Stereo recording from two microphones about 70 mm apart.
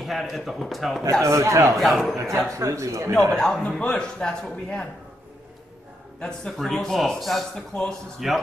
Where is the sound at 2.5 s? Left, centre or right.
Right.